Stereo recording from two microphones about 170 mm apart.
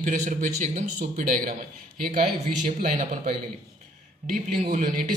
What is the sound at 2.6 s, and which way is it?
Speech, 50° right (ahead or behind).